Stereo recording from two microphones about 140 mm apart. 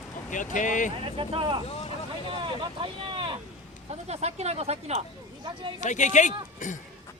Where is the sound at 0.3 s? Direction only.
65° left (ahead or behind).